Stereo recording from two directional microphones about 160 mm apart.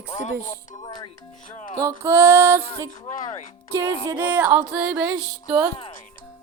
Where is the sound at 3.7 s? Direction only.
15° right (ahead or behind).